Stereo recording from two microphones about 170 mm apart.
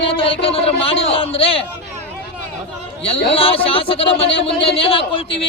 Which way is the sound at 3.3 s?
35° left (ahead or behind).